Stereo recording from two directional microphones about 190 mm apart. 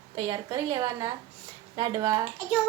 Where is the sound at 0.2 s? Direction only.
25° right (ahead or behind).